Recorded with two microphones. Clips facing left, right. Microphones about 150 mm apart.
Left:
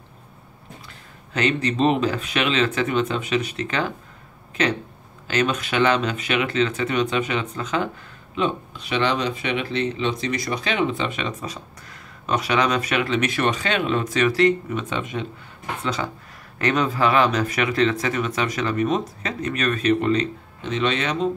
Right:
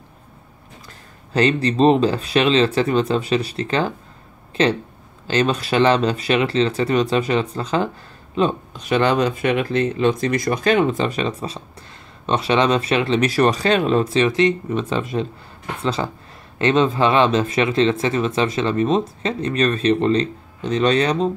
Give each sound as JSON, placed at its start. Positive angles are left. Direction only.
{"t": 1.3, "sound": "speech", "side_deg": -35}